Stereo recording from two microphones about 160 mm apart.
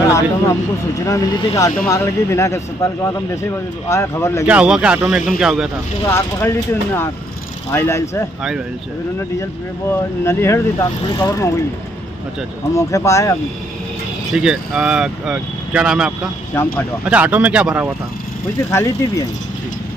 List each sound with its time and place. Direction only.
0.1 s speech: 20° left (ahead or behind)
4.5 s speech: 5° right (ahead or behind)
6.0 s speech: 15° left (ahead or behind)
9.4 s speech: 15° left (ahead or behind)
12.7 s speech: 20° left (ahead or behind)
14.3 s speech: 5° right (ahead or behind)
16.5 s speech: 15° left (ahead or behind)
17.0 s speech: 10° right (ahead or behind)
18.7 s speech: 20° left (ahead or behind)